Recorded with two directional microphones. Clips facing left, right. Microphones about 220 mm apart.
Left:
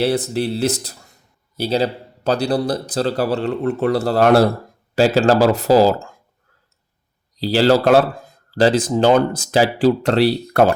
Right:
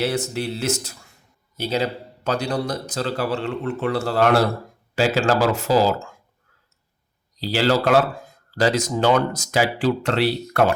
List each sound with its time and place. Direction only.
0.0 s a man's voice: 35° left (ahead or behind)
7.3 s a man's voice: 35° left (ahead or behind)